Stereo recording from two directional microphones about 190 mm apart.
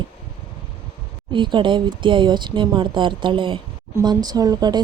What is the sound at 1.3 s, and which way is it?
Speech, 25° right (ahead or behind).